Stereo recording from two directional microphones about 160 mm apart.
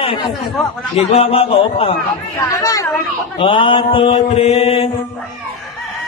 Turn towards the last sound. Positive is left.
turn(degrees=35)  # may be behind; listen again after turning